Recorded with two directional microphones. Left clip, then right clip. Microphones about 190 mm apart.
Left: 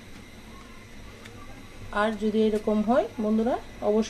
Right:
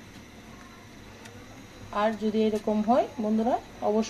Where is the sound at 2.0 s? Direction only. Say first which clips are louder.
Left 1 dB; 15° left (ahead or behind).